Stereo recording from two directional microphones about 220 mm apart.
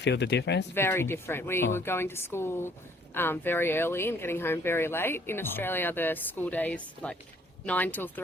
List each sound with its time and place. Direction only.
0.0 s speech: 50° left (ahead or behind)
0.7 s speech: 10° left (ahead or behind)